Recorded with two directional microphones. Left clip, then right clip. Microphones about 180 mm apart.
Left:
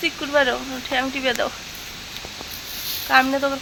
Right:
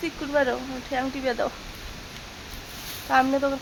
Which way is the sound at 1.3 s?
20° left (ahead or behind).